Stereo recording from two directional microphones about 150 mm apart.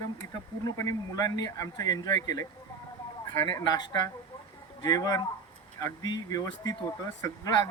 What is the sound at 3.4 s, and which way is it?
Speech, 25° left (ahead or behind).